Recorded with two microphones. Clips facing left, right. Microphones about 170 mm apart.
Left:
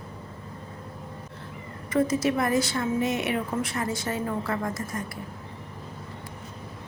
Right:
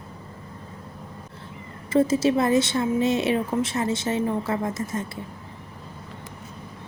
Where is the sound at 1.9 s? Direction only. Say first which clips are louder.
Right 4 dB; 25° right (ahead or behind).